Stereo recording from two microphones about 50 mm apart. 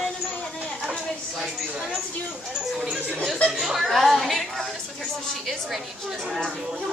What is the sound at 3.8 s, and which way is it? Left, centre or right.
Speech, centre.